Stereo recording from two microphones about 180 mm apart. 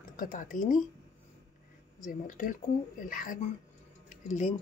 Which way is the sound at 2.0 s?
50° left (ahead or behind).